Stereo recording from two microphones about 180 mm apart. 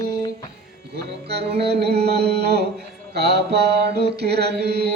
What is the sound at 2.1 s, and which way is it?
Mantra, 65° right (ahead or behind).